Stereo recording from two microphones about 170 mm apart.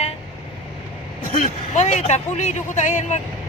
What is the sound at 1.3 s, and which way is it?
Speech, 45° left (ahead or behind).